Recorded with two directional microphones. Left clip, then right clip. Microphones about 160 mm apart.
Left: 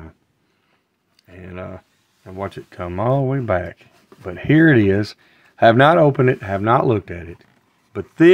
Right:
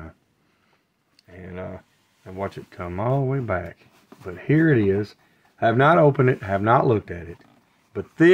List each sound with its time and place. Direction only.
1.1 s a sound: 30° left (ahead or behind)
2.2 s speech: 30° left (ahead or behind)
5.9 s speech: 25° left (ahead or behind)